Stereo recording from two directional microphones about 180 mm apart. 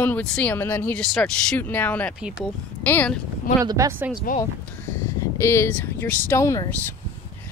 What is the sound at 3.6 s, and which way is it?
Speech, 15° right (ahead or behind).